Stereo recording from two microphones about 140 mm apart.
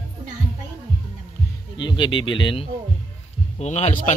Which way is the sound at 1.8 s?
35° left (ahead or behind).